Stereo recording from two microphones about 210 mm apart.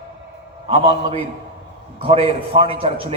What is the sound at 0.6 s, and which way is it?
Speech, 25° right (ahead or behind).